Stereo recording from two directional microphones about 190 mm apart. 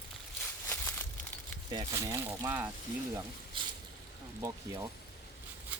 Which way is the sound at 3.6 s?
25° right (ahead or behind).